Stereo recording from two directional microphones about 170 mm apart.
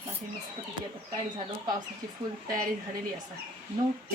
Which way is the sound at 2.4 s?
50° right (ahead or behind).